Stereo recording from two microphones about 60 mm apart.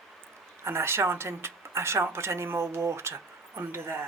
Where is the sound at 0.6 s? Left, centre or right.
Right.